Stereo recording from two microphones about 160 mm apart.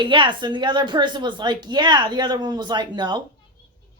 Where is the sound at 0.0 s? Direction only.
30° right (ahead or behind).